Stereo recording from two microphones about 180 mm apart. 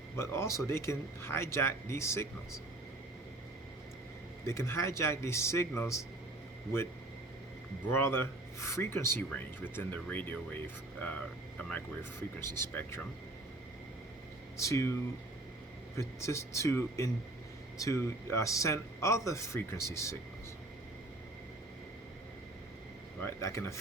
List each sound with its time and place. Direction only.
0.2 s speech: 15° left (ahead or behind)
4.4 s speech: 15° left (ahead or behind)
7.9 s speech: 15° left (ahead or behind)
12.4 s speech: 15° left (ahead or behind)
14.6 s speech: 15° left (ahead or behind)
16.0 s speech: 15° left (ahead or behind)
23.2 s speech: 15° left (ahead or behind)